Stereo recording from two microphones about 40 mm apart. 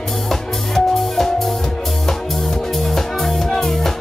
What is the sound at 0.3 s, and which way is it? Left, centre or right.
Music, centre.